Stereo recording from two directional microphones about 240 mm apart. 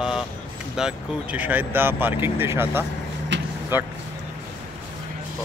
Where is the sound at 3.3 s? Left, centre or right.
Right.